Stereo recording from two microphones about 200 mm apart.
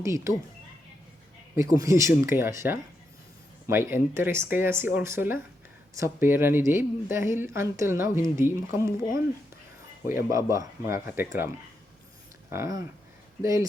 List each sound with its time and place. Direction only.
0.0 s speech: 15° right (ahead or behind)
1.5 s speech: 15° right (ahead or behind)
12.5 s speech: 15° right (ahead or behind)